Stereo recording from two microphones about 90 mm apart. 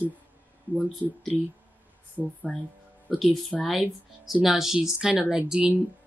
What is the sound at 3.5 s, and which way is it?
Speech, 10° left (ahead or behind).